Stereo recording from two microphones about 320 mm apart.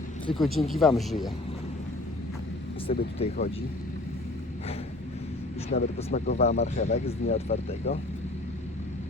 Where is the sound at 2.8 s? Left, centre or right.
Centre.